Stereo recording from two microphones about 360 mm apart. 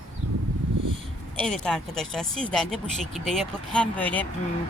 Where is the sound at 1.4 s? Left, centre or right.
Centre.